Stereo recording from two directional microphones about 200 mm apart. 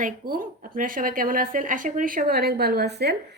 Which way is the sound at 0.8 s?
45° right (ahead or behind).